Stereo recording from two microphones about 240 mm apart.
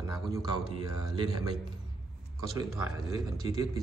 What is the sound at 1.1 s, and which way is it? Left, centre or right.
Speech, centre.